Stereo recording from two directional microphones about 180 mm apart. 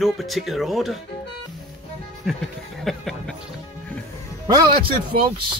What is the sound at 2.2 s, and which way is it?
Speech, centre (ahead or behind).